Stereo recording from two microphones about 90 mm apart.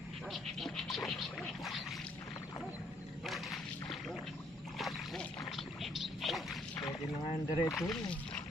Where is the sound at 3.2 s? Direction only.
Centre (ahead or behind).